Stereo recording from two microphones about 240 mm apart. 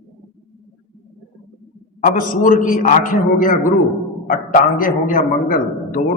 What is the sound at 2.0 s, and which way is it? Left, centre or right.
A man's voice, left.